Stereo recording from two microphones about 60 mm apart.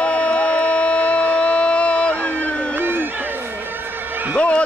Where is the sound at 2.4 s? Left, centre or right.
Left.